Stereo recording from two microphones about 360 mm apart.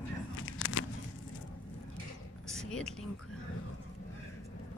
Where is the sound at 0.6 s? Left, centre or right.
Left.